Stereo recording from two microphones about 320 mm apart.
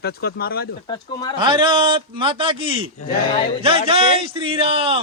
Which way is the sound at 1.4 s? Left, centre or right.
Centre.